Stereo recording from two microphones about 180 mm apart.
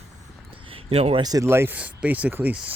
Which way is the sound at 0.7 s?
35° right (ahead or behind).